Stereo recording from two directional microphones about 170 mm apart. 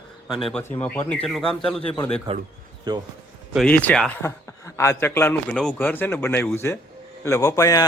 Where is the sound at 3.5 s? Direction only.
5° left (ahead or behind).